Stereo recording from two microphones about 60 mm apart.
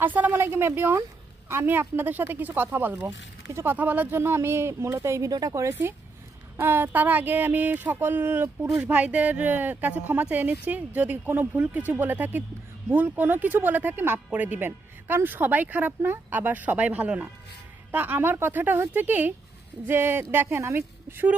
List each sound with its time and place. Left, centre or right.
0.0 s speech: right
0.3 s speech: right
3.5 s speech: right
3.8 s speech: right
4.1 s speech: right
5.3 s a woman's voice: right
6.6 s speech: right
8.8 s speech: right